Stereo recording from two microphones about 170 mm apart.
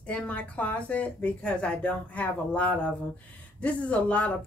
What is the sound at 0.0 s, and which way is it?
Speech, 5° left (ahead or behind).